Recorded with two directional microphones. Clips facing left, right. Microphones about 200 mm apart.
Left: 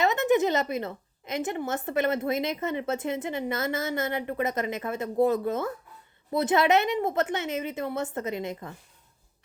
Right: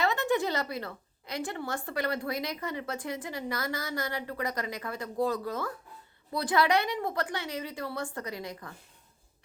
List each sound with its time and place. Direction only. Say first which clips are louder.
0.0 s a woman's voice: left 5 dB; 20° left (ahead or behind)